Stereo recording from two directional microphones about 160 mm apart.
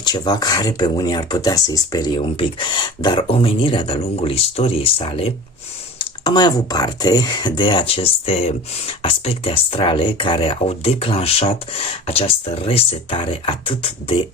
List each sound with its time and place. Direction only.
0.0 s speech: 25° left (ahead or behind)
6.2 s speech: 25° left (ahead or behind)